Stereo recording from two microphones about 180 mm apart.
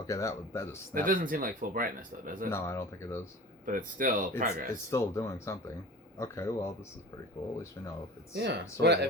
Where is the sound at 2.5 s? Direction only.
15° left (ahead or behind).